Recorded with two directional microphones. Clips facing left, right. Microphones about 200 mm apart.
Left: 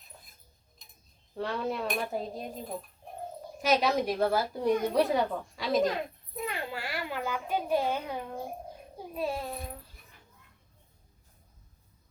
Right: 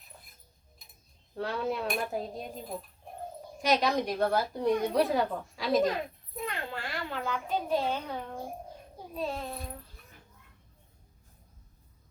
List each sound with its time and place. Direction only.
0.8 s cutlery: 10° right (ahead or behind)
1.4 s a woman's voice: centre (ahead or behind)
3.6 s a woman's voice: 5° left (ahead or behind)